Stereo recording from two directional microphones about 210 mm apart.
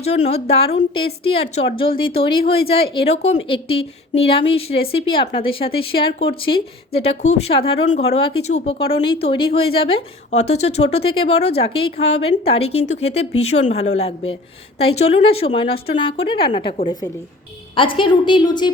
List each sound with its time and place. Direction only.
0.0 s speech: 30° left (ahead or behind)